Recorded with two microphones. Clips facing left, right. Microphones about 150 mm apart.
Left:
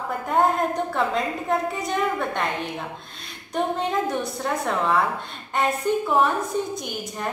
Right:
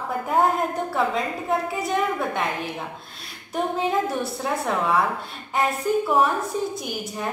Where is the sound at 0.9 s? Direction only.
Centre (ahead or behind).